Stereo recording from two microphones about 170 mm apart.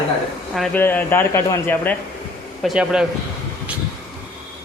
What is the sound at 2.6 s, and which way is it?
Speech, centre (ahead or behind).